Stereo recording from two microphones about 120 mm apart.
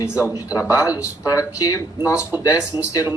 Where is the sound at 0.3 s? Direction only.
30° left (ahead or behind).